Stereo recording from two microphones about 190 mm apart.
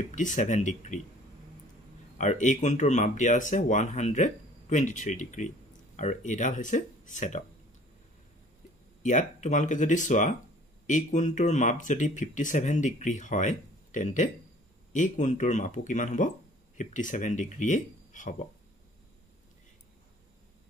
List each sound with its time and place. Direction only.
0.1 s speech: 40° left (ahead or behind)
2.1 s speech: 40° left (ahead or behind)
9.0 s speech: 40° left (ahead or behind)